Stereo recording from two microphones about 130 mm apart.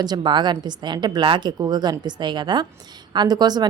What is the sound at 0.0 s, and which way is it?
A woman's voice, 35° right (ahead or behind).